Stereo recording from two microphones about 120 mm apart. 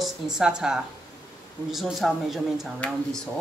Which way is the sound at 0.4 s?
5° right (ahead or behind).